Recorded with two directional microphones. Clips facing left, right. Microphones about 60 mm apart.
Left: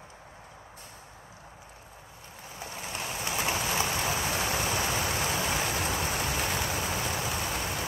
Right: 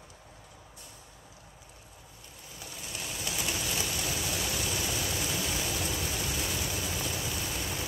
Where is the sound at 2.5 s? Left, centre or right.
Left.